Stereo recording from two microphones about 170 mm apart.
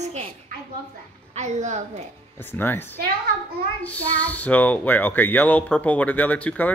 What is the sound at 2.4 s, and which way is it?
Speech, 10° left (ahead or behind).